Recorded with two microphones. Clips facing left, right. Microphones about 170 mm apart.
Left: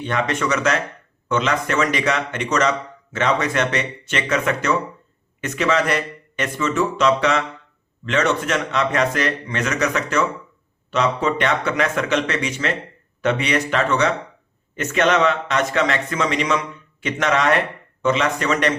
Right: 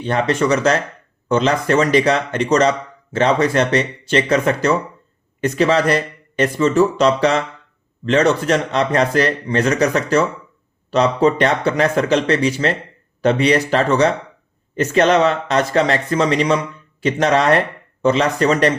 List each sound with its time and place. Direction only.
0.0 s speech: 35° right (ahead or behind)